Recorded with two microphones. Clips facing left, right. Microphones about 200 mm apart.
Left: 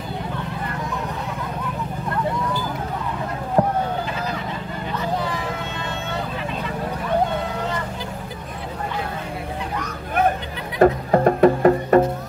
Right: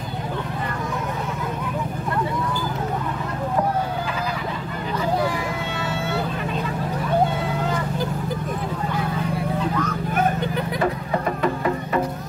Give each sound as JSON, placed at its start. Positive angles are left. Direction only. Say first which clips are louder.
{"t": 10.8, "sound": "music", "louder": "left 11 dB", "side_deg": 45}